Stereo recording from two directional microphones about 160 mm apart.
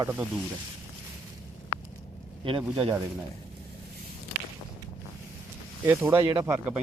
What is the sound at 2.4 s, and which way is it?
Speech, 35° right (ahead or behind).